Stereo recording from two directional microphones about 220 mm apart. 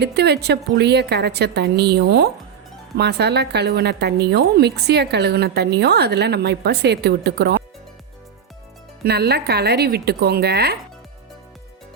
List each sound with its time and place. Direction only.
0.0 s speech: 50° right (ahead or behind)
9.0 s speech: 45° right (ahead or behind)